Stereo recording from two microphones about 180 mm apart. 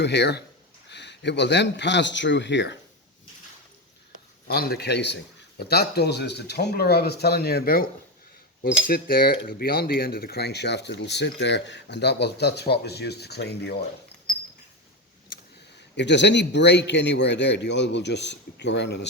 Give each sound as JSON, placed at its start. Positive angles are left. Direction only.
{"t": 0.0, "sound": "a man's voice", "side_deg": 70}
{"t": 4.5, "sound": "speech", "side_deg": 60}
{"t": 16.0, "sound": "a man's voice", "side_deg": 75}